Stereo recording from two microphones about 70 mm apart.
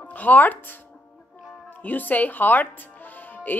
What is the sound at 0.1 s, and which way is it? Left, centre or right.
Speech, left.